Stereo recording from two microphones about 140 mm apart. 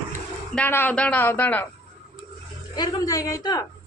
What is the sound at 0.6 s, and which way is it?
Speech, 15° left (ahead or behind).